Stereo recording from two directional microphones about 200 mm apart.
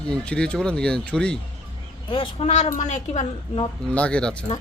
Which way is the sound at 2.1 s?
30° left (ahead or behind).